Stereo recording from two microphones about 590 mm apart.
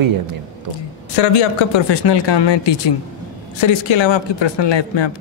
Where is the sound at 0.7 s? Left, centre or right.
Left.